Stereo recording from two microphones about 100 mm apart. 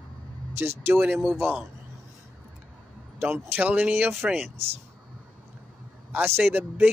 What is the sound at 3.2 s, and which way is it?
Speech, 20° right (ahead or behind).